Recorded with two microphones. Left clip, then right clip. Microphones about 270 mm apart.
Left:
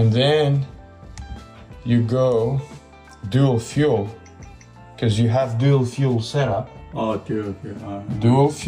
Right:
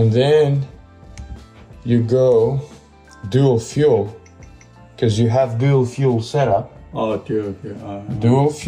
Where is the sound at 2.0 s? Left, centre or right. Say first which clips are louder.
Right 6 dB; centre.